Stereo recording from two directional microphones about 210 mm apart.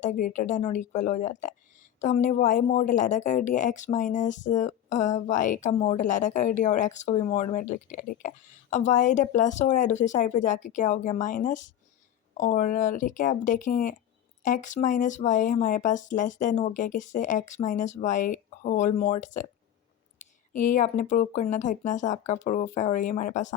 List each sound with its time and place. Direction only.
0.0 s a woman's voice: 40° left (ahead or behind)